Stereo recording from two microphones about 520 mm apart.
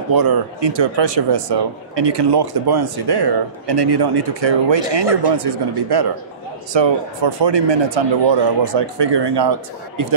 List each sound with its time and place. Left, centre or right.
0.1 s speech: right